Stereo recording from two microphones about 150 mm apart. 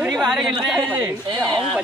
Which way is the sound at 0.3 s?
Centre (ahead or behind).